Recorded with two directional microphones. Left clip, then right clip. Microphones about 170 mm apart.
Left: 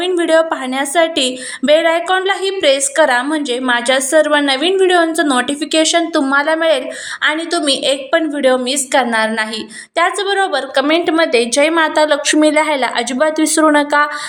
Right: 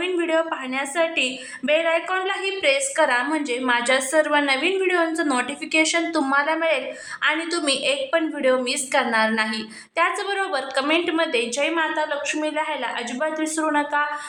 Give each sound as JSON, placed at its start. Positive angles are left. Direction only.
{"t": 0.0, "sound": "a woman's voice", "side_deg": 35}
{"t": 11.7, "sound": "a woman's voice", "side_deg": 60}